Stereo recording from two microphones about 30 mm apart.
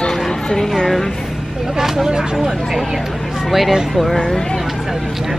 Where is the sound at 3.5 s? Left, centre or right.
Centre.